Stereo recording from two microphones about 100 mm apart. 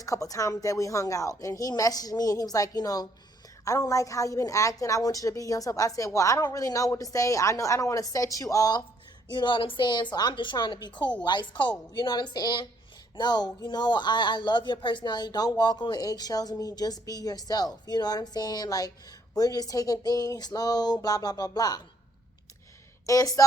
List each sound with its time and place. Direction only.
0.0 s a woman's voice: 35° left (ahead or behind)
9.3 s a woman's voice: 55° left (ahead or behind)
23.0 s a woman's voice: 35° left (ahead or behind)